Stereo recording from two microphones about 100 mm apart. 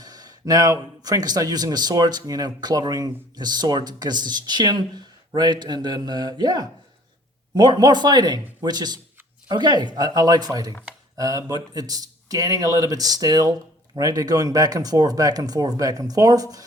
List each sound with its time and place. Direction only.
0.0 s a man's voice: 40° right (ahead or behind)